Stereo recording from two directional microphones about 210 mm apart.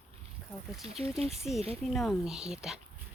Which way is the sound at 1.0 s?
30° right (ahead or behind).